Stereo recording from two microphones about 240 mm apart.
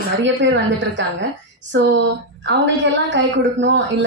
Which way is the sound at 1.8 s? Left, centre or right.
Right.